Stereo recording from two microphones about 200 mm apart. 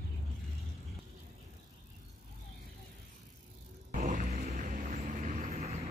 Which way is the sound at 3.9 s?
40° right (ahead or behind).